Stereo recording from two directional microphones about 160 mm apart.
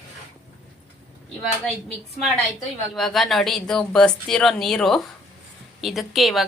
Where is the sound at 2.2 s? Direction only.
Centre (ahead or behind).